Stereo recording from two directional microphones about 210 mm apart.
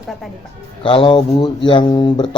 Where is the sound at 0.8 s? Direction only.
25° left (ahead or behind).